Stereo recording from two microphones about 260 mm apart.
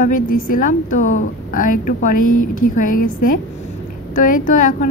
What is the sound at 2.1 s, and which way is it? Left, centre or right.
Speech, left.